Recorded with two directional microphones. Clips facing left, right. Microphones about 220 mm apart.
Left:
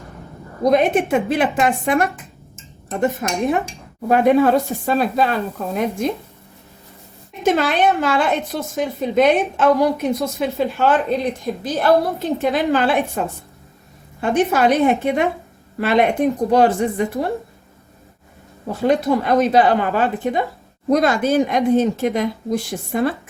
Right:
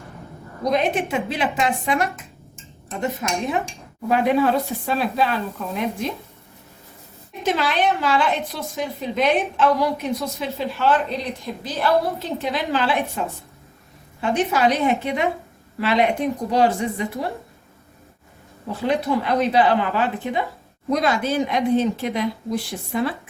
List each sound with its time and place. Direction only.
0.7 s a woman's voice: 50° left (ahead or behind)
3.2 s a woman's voice: 50° left (ahead or behind)
7.4 s a woman's voice: 50° left (ahead or behind)
14.2 s a woman's voice: 50° left (ahead or behind)
18.7 s a woman's voice: 45° left (ahead or behind)